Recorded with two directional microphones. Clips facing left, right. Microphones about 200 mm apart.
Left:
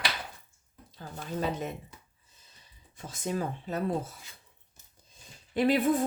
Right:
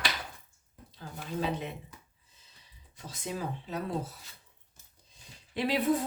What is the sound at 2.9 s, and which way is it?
Speech, 50° left (ahead or behind).